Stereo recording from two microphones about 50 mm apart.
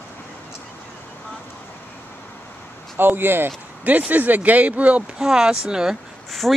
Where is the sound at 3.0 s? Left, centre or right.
Right.